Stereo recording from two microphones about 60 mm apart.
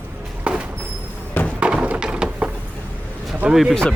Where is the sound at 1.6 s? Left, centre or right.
Centre.